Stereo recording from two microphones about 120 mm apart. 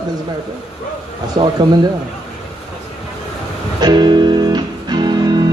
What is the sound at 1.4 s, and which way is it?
Speech, 55° right (ahead or behind).